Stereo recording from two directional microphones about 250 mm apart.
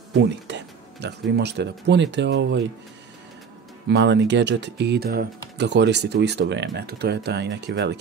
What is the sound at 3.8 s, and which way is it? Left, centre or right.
Speech, right.